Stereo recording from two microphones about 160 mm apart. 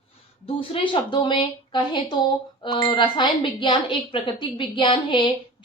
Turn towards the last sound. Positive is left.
turn(degrees=30)  # may be behind; listen again after turning